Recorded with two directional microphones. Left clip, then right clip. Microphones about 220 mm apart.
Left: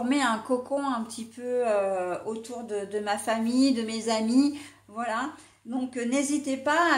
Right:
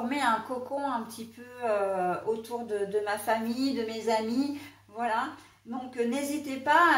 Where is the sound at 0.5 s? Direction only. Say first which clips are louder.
Left 4 dB; 45° left (ahead or behind).